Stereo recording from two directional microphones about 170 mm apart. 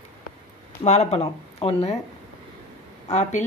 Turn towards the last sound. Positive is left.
turn(degrees=40)  # may be behind; listen again after turning